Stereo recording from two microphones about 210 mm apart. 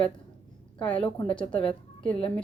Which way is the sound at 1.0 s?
25° left (ahead or behind).